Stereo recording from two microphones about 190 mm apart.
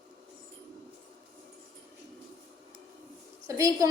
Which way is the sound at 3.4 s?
15° right (ahead or behind).